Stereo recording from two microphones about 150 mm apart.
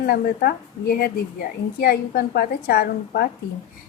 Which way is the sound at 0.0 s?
90° left.